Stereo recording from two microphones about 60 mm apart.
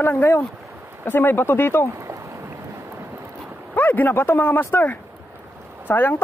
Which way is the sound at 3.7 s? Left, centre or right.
Left.